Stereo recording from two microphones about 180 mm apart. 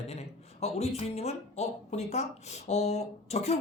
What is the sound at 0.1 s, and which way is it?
Speech, 35° left (ahead or behind).